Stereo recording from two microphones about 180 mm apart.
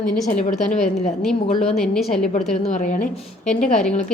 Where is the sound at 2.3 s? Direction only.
40° left (ahead or behind).